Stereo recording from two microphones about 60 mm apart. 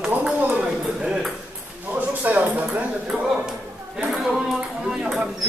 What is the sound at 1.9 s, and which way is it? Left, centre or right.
Speech, right.